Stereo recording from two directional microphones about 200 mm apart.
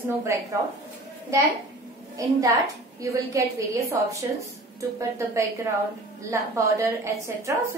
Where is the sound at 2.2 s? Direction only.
15° right (ahead or behind).